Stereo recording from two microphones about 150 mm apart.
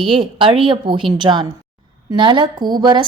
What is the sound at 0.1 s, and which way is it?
A woman's voice, 35° right (ahead or behind).